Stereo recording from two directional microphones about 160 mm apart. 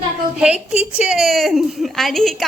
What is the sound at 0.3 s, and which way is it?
A woman's voice, 5° right (ahead or behind).